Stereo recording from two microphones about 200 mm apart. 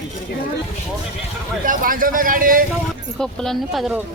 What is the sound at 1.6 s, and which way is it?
Speech, 45° right (ahead or behind).